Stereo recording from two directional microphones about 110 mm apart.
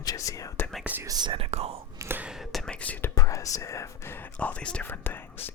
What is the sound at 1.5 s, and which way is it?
Whispering, 70° right (ahead or behind).